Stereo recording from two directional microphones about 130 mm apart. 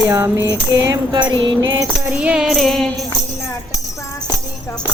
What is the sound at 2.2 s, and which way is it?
Speech, 10° right (ahead or behind).